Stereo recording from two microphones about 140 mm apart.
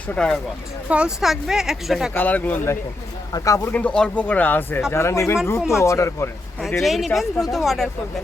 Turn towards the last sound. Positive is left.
turn(degrees=0)  # may be behind; listen again after turning